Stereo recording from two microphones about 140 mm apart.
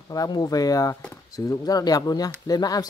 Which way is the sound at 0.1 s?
25° left (ahead or behind).